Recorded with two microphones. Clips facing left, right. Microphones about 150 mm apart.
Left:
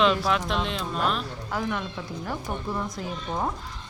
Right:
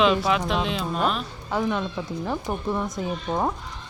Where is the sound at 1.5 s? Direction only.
25° right (ahead or behind).